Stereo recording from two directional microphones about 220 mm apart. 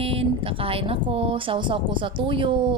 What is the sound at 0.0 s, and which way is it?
Speech, 25° right (ahead or behind).